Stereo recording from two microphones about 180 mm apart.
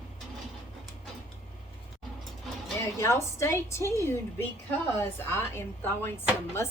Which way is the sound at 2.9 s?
15° left (ahead or behind).